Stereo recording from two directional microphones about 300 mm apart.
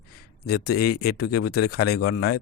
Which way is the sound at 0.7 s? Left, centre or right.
Left.